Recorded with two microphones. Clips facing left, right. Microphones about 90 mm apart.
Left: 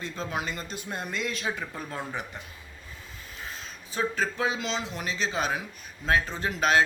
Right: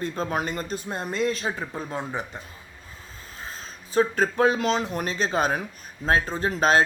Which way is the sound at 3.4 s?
40° right (ahead or behind).